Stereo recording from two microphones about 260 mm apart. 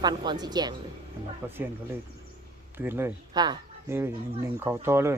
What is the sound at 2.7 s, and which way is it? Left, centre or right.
Speech, centre.